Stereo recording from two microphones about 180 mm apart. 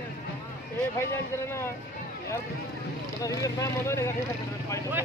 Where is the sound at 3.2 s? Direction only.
20° left (ahead or behind).